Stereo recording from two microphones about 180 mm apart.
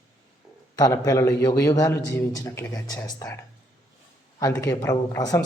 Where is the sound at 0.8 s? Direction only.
20° left (ahead or behind).